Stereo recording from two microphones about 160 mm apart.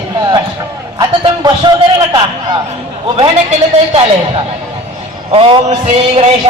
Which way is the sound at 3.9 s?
35° right (ahead or behind).